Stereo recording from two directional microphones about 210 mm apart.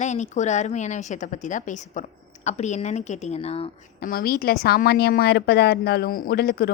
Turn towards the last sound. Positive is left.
turn(degrees=50)  # may be behind; listen again after turning